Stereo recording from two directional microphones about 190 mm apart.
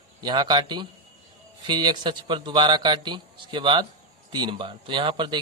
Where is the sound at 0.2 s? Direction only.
25° right (ahead or behind).